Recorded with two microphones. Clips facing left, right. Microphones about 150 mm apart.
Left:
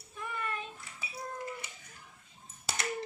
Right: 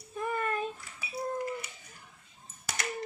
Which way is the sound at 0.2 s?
45° right (ahead or behind).